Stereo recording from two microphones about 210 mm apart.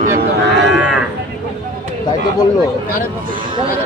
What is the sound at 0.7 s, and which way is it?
Speech, 5° right (ahead or behind).